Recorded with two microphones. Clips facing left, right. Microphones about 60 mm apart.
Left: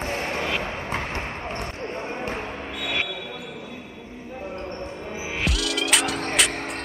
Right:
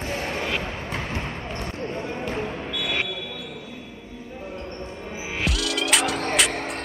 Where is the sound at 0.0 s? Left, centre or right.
Left.